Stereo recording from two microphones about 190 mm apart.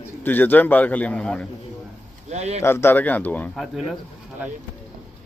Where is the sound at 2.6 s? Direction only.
15° left (ahead or behind).